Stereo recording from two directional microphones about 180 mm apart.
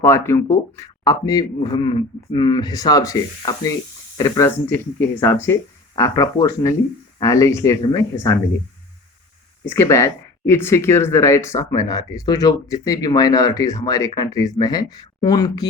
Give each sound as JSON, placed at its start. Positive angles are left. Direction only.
{"t": 0.0, "sound": "speech", "side_deg": 15}
{"t": 9.6, "sound": "speech", "side_deg": 15}